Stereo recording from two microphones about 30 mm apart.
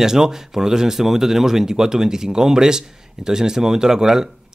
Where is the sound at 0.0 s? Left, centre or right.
Centre.